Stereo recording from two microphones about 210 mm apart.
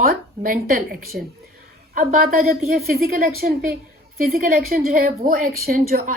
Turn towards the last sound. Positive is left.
turn(degrees=-40)  # may be behind; listen again after turning